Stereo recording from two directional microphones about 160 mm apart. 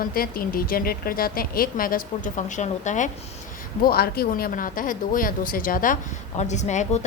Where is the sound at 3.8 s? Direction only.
75° left (ahead or behind); by 6.0 s 60° left (ahead or behind).